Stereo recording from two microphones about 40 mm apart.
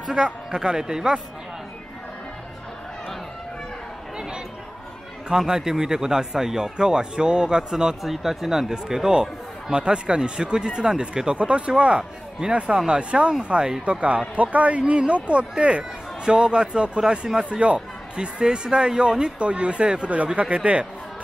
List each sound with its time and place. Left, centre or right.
0.1 s speech: centre
5.4 s speech: centre
8.0 s speech: centre
11.3 s speech: right
14.3 s speech: right
14.8 s speech: right